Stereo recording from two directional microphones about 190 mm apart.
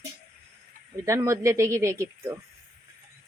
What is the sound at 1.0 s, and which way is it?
Speech, 15° right (ahead or behind).